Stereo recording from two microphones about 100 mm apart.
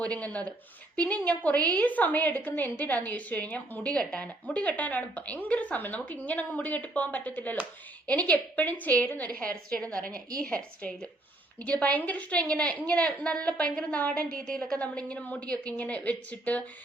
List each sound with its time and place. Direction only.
0.0 s a woman's voice: 15° left (ahead or behind)